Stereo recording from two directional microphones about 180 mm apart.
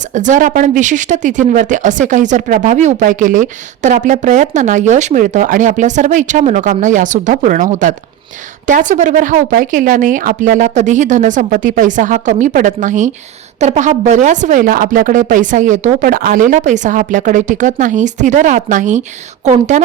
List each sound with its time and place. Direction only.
0.1 s a woman's voice: 45° right (ahead or behind)